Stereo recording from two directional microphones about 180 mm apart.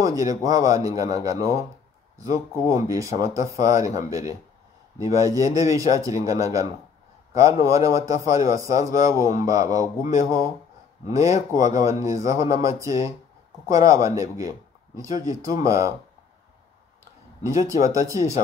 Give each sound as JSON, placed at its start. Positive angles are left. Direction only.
{"t": 0.0, "sound": "a man's voice", "side_deg": -20}
{"t": 17.4, "sound": "speech", "side_deg": -15}